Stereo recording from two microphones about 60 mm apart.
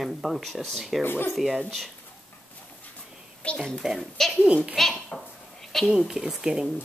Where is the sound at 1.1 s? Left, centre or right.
Left.